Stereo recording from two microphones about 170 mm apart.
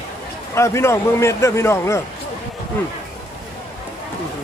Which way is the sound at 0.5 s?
15° left (ahead or behind).